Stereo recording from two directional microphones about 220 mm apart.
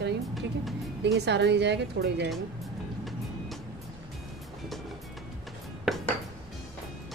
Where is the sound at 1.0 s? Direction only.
50° right (ahead or behind).